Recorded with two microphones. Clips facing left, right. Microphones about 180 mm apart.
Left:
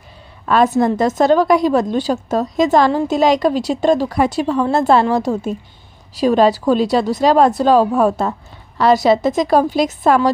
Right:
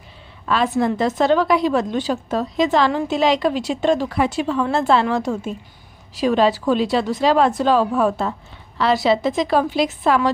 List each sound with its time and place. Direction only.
0.5 s a woman's voice: 45° left (ahead or behind)